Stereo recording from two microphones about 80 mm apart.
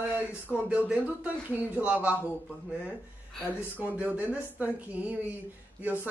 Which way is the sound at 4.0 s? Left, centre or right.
Centre.